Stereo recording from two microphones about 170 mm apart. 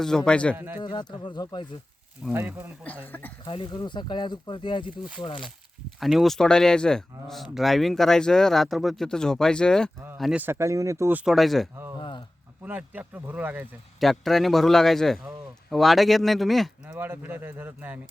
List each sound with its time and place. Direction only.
0.0 s speech: 5° left (ahead or behind)
0.5 s speech: 15° right (ahead or behind)
0.8 s speech: 25° left (ahead or behind)
2.3 s speech: 10° right (ahead or behind)
3.1 s speech: 10° left (ahead or behind)
3.4 s speech: 30° left (ahead or behind)
6.0 s speech: centre (ahead or behind)
10.4 s speech: 15° right (ahead or behind); by 11.7 s centre (ahead or behind)
11.9 s speech: 25° left (ahead or behind)
12.6 s speech: 10° right (ahead or behind)
14.0 s speech: centre (ahead or behind)
17.0 s speech: 10° right (ahead or behind)